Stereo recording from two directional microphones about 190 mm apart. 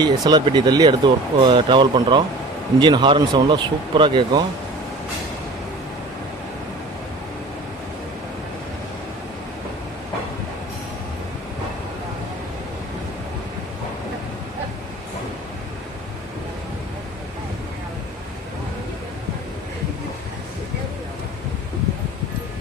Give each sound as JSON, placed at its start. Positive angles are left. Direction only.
{"t": 0.0, "sound": "speech", "side_deg": -25}